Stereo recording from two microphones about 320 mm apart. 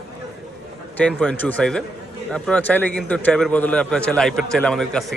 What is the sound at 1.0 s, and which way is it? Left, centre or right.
A man's voice, centre.